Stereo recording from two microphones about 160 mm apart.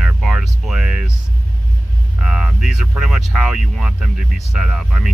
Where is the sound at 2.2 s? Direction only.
5° right (ahead or behind).